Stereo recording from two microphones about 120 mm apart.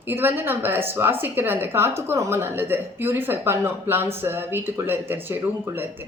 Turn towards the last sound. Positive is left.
turn(degrees=-20)  # may be behind; listen again after turning